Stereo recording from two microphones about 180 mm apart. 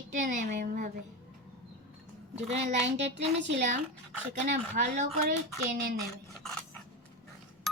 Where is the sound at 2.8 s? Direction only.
90° right.